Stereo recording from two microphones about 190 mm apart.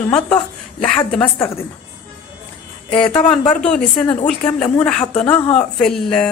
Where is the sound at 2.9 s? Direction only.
25° left (ahead or behind).